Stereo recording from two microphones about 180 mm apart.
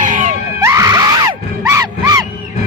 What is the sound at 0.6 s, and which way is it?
Music, 15° right (ahead or behind).